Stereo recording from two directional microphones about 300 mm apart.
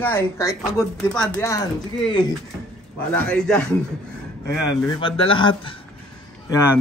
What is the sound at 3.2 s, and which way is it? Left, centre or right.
Speech, centre.